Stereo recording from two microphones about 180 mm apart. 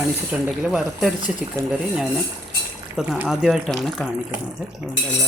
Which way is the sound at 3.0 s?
5° right (ahead or behind).